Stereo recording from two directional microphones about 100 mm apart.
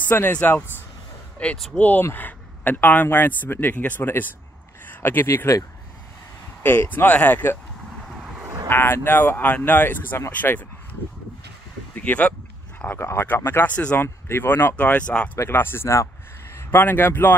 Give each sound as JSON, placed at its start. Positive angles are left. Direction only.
{"t": 0.0, "sound": "speech", "side_deg": 20}
{"t": 8.6, "sound": "speech", "side_deg": 25}
{"t": 15.3, "sound": "a man's voice", "side_deg": 25}